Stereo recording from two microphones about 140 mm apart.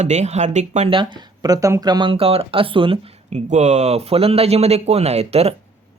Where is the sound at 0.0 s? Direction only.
55° right (ahead or behind).